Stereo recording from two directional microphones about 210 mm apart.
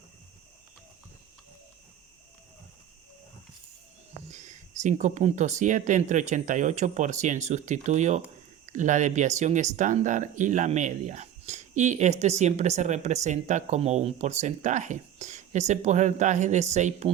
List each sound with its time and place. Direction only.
4.3 s speech: 35° right (ahead or behind)